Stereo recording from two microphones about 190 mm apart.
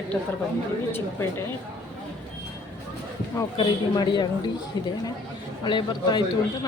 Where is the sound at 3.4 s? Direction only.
20° left (ahead or behind).